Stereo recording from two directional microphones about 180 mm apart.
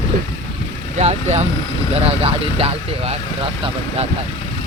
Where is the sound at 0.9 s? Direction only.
40° right (ahead or behind).